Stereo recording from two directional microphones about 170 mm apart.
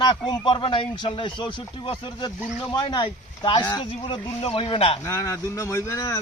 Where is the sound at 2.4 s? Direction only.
5° right (ahead or behind).